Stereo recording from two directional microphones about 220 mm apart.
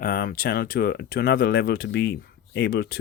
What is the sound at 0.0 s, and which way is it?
Speech, 40° left (ahead or behind).